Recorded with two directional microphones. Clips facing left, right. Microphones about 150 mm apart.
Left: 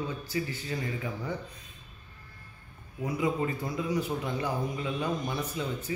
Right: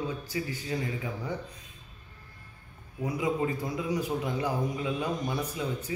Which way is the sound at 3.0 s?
10° right (ahead or behind).